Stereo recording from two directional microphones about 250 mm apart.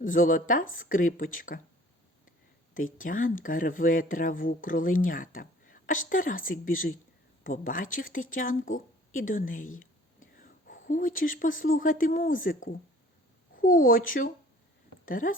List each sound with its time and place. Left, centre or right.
0.0 s speech: left
2.7 s speech: left
13.6 s speech: left